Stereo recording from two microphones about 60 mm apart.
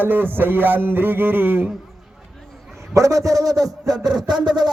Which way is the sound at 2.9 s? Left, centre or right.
Right.